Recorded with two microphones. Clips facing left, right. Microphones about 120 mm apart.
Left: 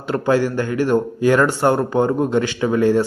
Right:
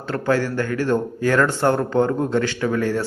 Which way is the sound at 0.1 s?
15° left (ahead or behind).